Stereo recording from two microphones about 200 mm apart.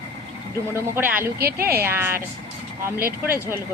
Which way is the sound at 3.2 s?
10° right (ahead or behind).